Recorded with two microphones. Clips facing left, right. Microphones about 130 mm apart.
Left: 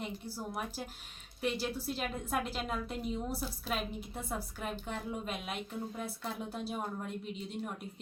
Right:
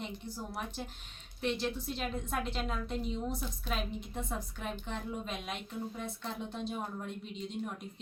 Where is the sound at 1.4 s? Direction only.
5° left (ahead or behind).